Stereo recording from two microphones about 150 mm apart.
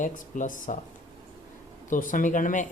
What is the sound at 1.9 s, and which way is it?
Speech, 60° left (ahead or behind).